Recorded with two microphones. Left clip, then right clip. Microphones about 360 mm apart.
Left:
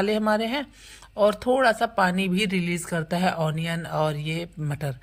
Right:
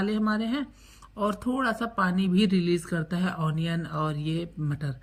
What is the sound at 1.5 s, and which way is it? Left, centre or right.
Speech, left.